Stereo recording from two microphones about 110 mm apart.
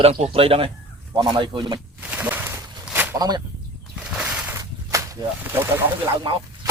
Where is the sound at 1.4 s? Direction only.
45° right (ahead or behind).